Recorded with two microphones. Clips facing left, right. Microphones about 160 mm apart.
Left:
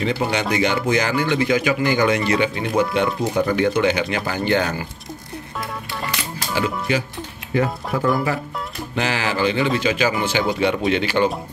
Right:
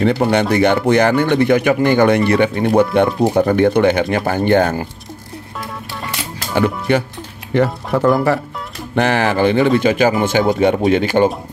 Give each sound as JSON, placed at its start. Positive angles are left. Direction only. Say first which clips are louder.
{"t": 0.0, "sound": "speech", "louder": "right 7 dB", "side_deg": -55}
{"t": 6.5, "sound": "speech", "louder": "right 6 dB", "side_deg": -60}
{"t": 7.5, "sound": "speech", "louder": "right 5 dB", "side_deg": -70}